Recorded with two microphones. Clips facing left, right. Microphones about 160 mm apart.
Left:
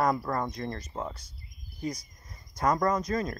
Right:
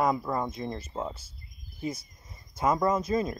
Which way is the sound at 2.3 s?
5° right (ahead or behind).